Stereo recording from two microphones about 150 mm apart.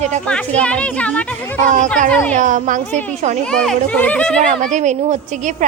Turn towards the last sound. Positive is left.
turn(degrees=-50)  # may be behind; listen again after turning